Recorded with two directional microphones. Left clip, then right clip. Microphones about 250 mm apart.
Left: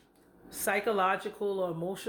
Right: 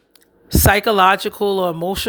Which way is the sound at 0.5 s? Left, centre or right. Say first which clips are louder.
Right 15 dB; right.